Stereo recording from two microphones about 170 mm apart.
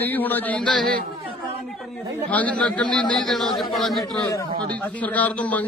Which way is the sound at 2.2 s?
10° left (ahead or behind).